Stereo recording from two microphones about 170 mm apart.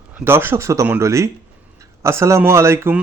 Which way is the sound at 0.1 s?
10° right (ahead or behind).